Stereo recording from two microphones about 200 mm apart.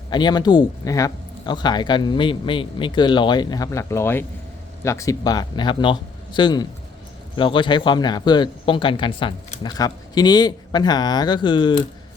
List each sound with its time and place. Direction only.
0.1 s speech: 20° left (ahead or behind)